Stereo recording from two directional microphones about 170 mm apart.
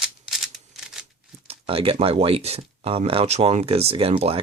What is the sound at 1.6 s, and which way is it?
Speech, 35° right (ahead or behind).